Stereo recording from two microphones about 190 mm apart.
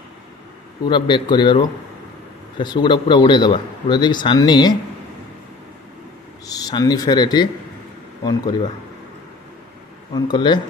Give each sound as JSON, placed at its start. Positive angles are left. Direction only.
{"t": 0.8, "sound": "speech", "side_deg": 25}
{"t": 6.4, "sound": "speech", "side_deg": 20}
{"t": 10.1, "sound": "speech", "side_deg": 25}